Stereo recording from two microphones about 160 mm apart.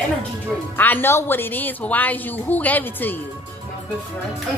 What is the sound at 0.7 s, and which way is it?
A woman's voice, 10° left (ahead or behind).